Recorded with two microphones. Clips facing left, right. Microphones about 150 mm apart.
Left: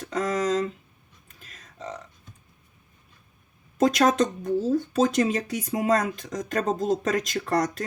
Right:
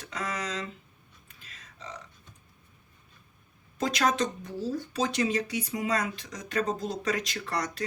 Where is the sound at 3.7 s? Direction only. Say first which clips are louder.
Left 7 dB; 50° left (ahead or behind).